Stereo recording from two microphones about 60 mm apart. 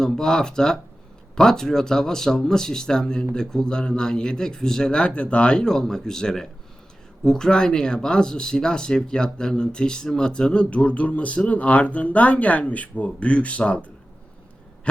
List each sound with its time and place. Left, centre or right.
0.0 s speech: centre